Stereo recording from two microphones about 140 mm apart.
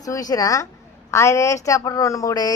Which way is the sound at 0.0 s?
25° left (ahead or behind).